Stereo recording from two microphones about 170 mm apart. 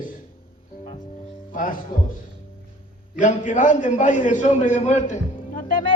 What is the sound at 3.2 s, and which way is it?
A man's voice, 45° left (ahead or behind).